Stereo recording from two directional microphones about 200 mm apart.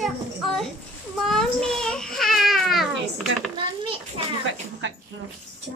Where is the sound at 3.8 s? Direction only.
25° right (ahead or behind).